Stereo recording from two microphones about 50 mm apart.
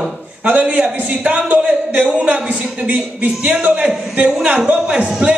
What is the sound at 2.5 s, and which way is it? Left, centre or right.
A woman's voice, right.